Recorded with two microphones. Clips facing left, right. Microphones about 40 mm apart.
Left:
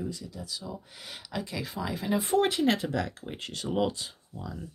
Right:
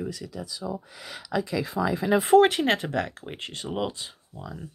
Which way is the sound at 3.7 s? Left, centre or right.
Centre.